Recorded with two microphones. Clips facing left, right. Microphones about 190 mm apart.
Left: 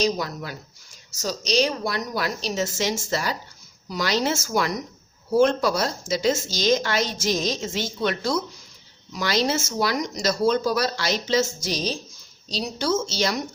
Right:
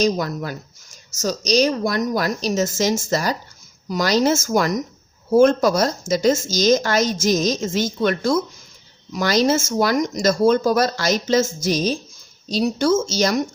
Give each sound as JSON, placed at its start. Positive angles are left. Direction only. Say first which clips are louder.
{"t": 0.0, "sound": "speech", "louder": "right 4 dB", "side_deg": -50}